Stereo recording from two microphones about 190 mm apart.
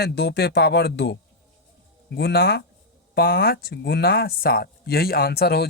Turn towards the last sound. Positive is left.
turn(degrees=55)  # may be behind; listen again after turning